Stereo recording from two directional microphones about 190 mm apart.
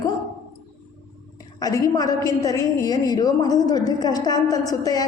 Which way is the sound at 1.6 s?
20° left (ahead or behind).